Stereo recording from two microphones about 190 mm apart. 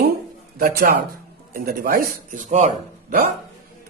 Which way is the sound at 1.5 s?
50° right (ahead or behind).